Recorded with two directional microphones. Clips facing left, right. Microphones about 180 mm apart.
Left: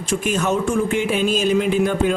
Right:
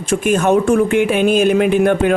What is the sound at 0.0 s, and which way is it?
Speech, 55° right (ahead or behind).